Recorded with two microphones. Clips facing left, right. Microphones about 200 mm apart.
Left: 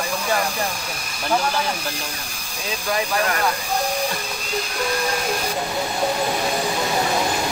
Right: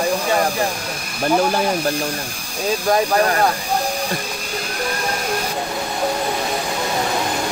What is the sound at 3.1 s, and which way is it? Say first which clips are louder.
Speech: right 6 dB; 40° right (ahead or behind).